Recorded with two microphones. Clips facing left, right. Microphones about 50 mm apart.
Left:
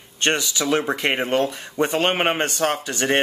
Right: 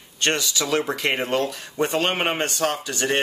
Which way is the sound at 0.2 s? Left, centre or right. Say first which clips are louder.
Left 2 dB; left.